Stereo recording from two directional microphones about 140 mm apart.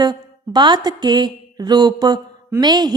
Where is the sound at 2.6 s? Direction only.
30° right (ahead or behind).